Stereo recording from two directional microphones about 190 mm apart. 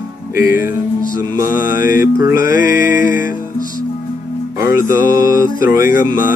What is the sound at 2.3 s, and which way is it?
Music, 45° left (ahead or behind).